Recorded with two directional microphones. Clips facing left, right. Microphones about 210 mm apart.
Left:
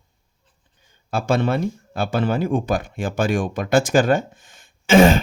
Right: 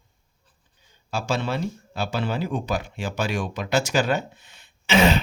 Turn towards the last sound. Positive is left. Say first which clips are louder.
# left 6 dB
turn(degrees=50)  # may be behind; listen again after turning